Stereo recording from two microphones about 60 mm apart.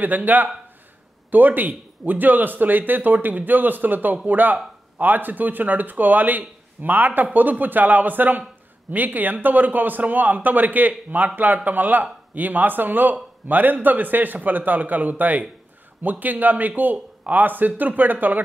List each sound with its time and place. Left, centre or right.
0.0 s a man's voice: right